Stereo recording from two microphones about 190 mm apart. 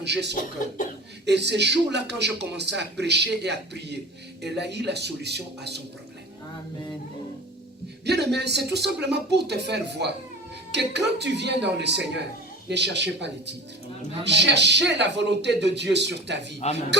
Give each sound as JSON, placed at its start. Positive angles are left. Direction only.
{"t": 0.0, "sound": "speech", "side_deg": -65}
{"t": 8.0, "sound": "speech", "side_deg": -60}